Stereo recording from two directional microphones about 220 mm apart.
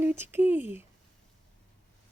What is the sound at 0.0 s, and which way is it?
Speech, 10° right (ahead or behind).